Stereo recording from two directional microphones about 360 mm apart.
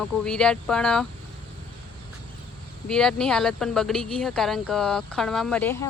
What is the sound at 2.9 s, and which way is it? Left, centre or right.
Speech, centre.